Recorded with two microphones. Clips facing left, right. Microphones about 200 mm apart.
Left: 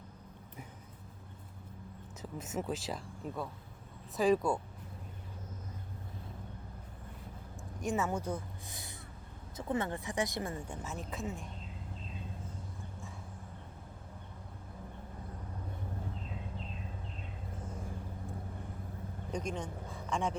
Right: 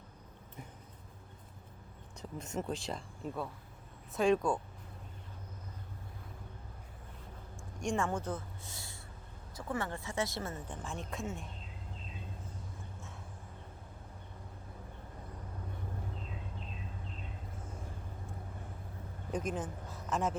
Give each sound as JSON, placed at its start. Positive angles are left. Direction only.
{"t": 2.4, "sound": "speech", "side_deg": 5}
{"t": 7.8, "sound": "speech", "side_deg": 5}
{"t": 19.3, "sound": "speech", "side_deg": -5}